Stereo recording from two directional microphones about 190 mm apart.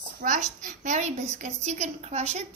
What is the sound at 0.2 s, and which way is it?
A woman's voice, 45° right (ahead or behind).